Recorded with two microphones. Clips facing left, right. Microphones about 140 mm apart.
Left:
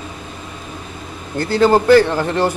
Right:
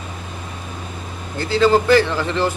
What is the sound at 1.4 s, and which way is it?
A man's voice, 55° left (ahead or behind).